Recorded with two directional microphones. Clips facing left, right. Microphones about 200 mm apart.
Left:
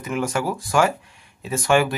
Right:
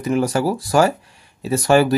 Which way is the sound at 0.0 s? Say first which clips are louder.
Right 6 dB; 35° right (ahead or behind).